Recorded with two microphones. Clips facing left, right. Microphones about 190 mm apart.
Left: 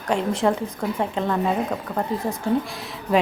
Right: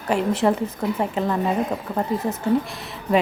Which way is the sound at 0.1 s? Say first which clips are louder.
Right 1 dB; 5° right (ahead or behind).